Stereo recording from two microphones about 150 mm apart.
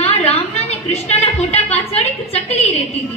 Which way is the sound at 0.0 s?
45° left (ahead or behind).